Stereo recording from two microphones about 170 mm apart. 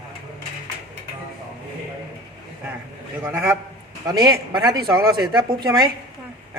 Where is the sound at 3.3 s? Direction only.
15° right (ahead or behind).